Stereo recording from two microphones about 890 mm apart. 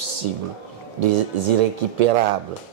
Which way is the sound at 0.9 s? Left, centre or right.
Right.